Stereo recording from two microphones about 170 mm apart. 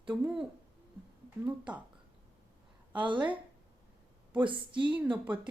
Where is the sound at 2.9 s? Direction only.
30° right (ahead or behind).